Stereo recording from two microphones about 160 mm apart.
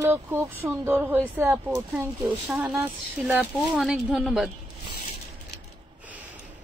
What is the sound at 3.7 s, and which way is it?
Speech, centre (ahead or behind).